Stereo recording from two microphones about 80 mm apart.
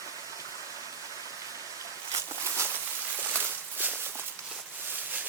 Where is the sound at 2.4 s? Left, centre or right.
Right.